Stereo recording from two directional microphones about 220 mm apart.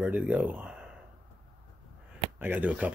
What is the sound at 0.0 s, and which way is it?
Speech, 5° right (ahead or behind).